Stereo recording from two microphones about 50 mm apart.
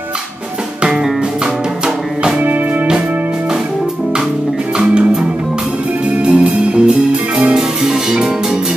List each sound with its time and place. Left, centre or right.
4.7 s music: centre
6.1 s music: right
6.9 s music: centre